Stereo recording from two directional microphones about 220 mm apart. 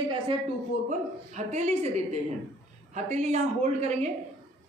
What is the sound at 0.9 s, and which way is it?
A woman's voice, 30° right (ahead or behind).